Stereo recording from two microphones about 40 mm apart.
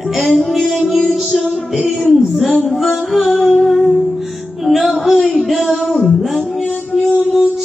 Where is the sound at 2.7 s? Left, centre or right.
Centre.